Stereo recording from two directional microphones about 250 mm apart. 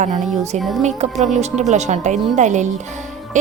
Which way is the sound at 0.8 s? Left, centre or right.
Right.